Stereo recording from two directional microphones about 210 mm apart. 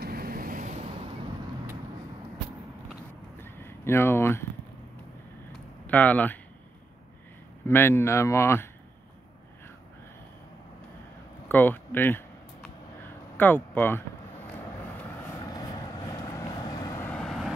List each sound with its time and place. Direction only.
0.0 s vehicle: 45° right (ahead or behind)
3.4 s a sound: 10° left (ahead or behind)
5.9 s speech: 10° left (ahead or behind)
7.6 s speech: 10° left (ahead or behind)
11.4 s speech: 10° left (ahead or behind)
13.4 s speech: 10° left (ahead or behind)
16.1 s vehicle: 20° left (ahead or behind); by 17.5 s centre (ahead or behind)